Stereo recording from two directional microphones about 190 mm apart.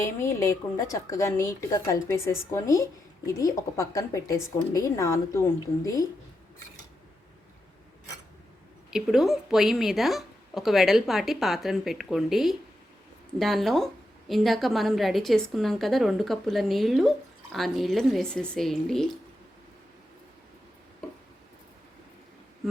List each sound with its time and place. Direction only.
0.0 s a woman's voice: 15° left (ahead or behind)
8.9 s a woman's voice: centre (ahead or behind)